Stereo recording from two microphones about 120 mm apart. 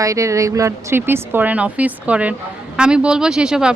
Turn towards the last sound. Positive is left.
turn(degrees=-5)  # may be behind; listen again after turning